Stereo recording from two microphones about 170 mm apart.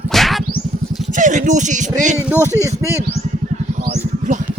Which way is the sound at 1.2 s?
45° right (ahead or behind).